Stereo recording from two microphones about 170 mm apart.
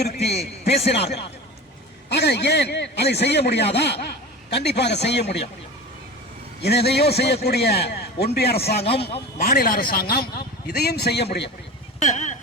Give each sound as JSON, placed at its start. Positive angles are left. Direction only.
{"t": 0.0, "sound": "a sound", "side_deg": 70}
{"t": 2.0, "sound": "a man's voice", "side_deg": 75}
{"t": 6.6, "sound": "a man's voice", "side_deg": 75}
{"t": 9.0, "sound": "a man's voice", "side_deg": 35}
{"t": 9.4, "sound": "a man's voice", "side_deg": 60}
{"t": 11.9, "sound": "a sound", "side_deg": 45}